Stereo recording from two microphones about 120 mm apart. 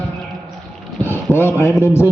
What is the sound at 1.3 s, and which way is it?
Speech, 20° left (ahead or behind).